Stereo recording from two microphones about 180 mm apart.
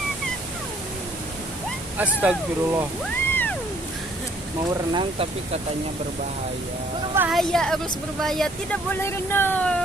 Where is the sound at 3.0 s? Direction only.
10° left (ahead or behind).